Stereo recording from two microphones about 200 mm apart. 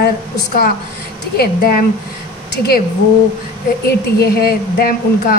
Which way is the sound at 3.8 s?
50° left (ahead or behind).